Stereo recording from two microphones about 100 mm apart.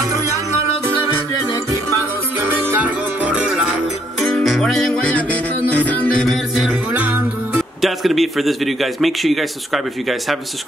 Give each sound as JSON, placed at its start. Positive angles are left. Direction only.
{"t": 2.4, "sound": "music", "side_deg": -20}
{"t": 4.2, "sound": "music", "side_deg": 0}
{"t": 6.2, "sound": "music", "side_deg": -5}
{"t": 6.9, "sound": "music", "side_deg": -20}
{"t": 7.8, "sound": "a man's voice", "side_deg": 0}